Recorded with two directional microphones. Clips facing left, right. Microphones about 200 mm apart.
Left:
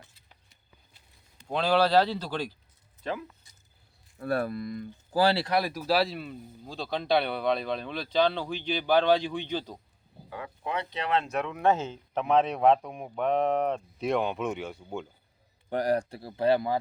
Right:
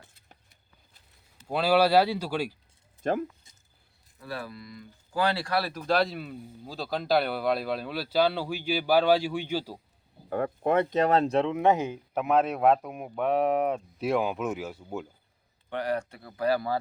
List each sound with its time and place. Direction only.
1.4 s speech: 5° right (ahead or behind)
3.0 s speech: 50° right (ahead or behind)
3.4 s a sound: 25° right (ahead or behind)
4.2 s speech: 55° left (ahead or behind)
5.1 s speech: 30° left (ahead or behind); by 9.8 s 10° right (ahead or behind)
10.2 s speech: 50° right (ahead or behind); by 15.0 s 5° right (ahead or behind)
15.7 s speech: 35° left (ahead or behind); by 16.7 s 20° left (ahead or behind)